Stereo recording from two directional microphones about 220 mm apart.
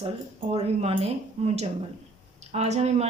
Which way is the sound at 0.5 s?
30° right (ahead or behind).